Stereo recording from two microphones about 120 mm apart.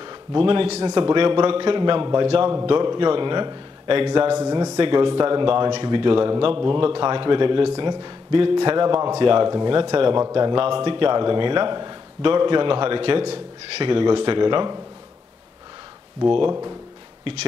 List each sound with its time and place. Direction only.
0.0 s a man's voice: 40° right (ahead or behind); by 0.8 s 55° right (ahead or behind)
0.8 s a man's voice: 40° right (ahead or behind)
2.7 s a man's voice: 40° right (ahead or behind)
10.1 s a man's voice: 30° right (ahead or behind)
17.2 s speech: 55° right (ahead or behind)